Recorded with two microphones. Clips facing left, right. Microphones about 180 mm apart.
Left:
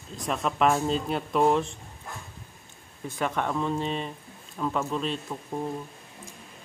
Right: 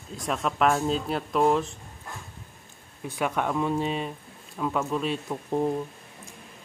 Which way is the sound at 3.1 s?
10° right (ahead or behind).